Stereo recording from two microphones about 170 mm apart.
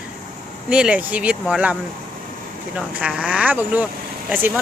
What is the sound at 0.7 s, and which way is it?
Speech, 5° right (ahead or behind).